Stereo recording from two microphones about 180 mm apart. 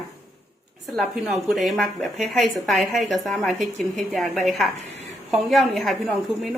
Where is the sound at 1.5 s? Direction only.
Centre (ahead or behind).